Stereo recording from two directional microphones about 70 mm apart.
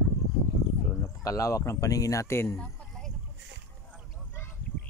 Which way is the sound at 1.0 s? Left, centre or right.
Left.